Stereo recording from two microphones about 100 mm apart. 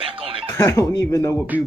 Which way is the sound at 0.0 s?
65° right (ahead or behind).